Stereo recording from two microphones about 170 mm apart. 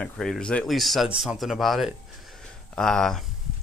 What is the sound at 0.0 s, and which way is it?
Speech, 5° left (ahead or behind).